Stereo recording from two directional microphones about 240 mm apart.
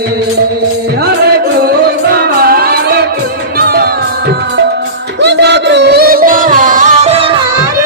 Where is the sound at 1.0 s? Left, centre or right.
Right.